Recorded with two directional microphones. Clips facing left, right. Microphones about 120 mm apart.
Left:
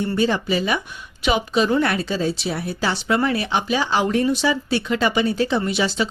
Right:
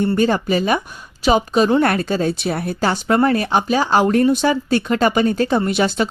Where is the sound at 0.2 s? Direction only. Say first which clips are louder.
Right 3 dB; 45° right (ahead or behind).